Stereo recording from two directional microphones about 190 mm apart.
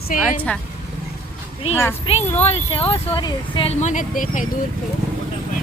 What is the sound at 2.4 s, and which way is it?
Speech, 30° left (ahead or behind).